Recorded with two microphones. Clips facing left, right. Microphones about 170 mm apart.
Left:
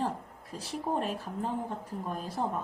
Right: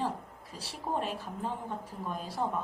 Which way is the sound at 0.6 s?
45° left (ahead or behind).